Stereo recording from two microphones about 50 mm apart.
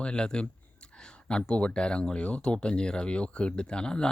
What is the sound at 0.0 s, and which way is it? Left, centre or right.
Speech, centre.